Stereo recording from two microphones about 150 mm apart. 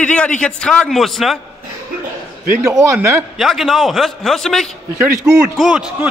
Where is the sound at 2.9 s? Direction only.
15° right (ahead or behind).